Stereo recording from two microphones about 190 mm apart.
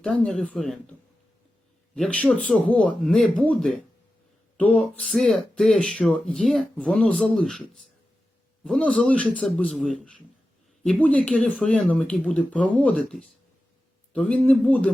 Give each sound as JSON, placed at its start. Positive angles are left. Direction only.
{"t": 0.0, "sound": "speech", "side_deg": 5}
{"t": 2.0, "sound": "speech", "side_deg": 5}
{"t": 8.6, "sound": "speech", "side_deg": 5}